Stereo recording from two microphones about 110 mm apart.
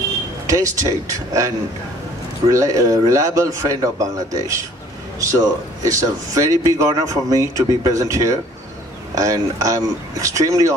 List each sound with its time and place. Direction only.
0.5 s a man's voice: 30° right (ahead or behind)
2.5 s a man's voice: 30° right (ahead or behind)